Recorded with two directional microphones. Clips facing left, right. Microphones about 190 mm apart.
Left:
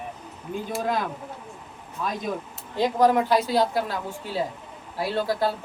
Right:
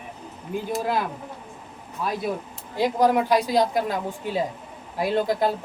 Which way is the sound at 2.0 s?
5° right (ahead or behind).